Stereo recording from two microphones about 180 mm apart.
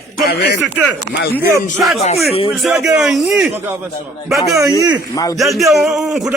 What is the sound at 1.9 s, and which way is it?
Speech, 35° left (ahead or behind).